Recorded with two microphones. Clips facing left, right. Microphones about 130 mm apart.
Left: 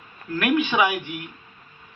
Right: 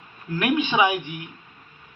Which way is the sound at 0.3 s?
20° right (ahead or behind).